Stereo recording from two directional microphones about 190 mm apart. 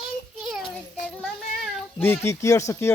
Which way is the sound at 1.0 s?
5° left (ahead or behind).